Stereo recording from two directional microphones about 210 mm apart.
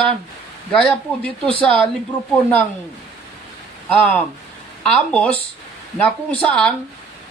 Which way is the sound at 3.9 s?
5° left (ahead or behind).